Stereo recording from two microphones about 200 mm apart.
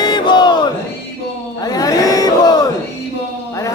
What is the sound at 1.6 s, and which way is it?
Crowd, 20° left (ahead or behind).